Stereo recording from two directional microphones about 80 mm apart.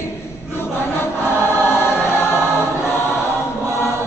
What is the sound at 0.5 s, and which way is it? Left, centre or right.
Choir, left.